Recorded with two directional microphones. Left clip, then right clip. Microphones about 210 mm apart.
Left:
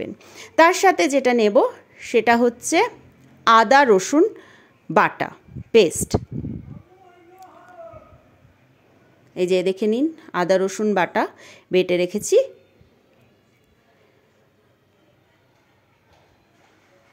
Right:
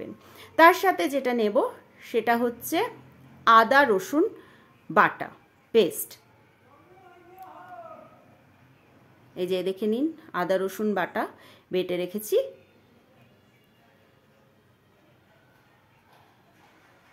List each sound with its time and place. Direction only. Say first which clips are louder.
0.0 s speech: left 8 dB; 30° left (ahead or behind)
9.3 s speech: left 8 dB; 35° left (ahead or behind)